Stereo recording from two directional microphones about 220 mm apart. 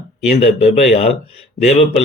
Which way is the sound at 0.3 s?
30° left (ahead or behind).